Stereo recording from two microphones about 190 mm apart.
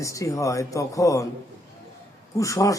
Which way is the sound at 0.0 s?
15° left (ahead or behind).